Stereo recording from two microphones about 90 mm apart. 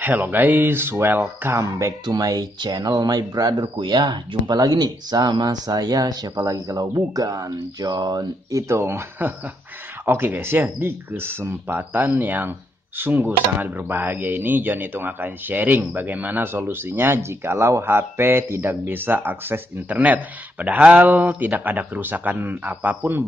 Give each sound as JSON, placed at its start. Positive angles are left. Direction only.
{"t": 0.0, "sound": "speech", "side_deg": -20}
{"t": 2.0, "sound": "speech", "side_deg": -45}